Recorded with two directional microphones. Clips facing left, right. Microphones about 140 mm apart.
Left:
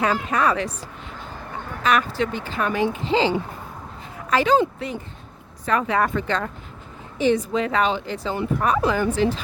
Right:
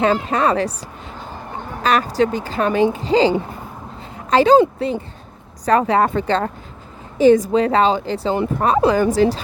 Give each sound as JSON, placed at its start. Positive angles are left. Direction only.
{"t": 0.0, "sound": "a woman's voice", "side_deg": -30}
{"t": 1.8, "sound": "a woman's voice", "side_deg": -35}